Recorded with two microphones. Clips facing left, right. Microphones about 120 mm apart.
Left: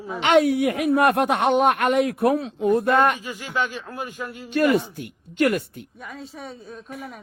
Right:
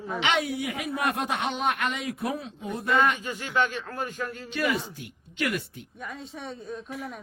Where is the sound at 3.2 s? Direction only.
5° left (ahead or behind).